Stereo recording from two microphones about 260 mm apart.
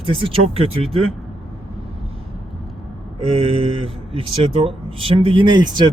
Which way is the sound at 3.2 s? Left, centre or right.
Right.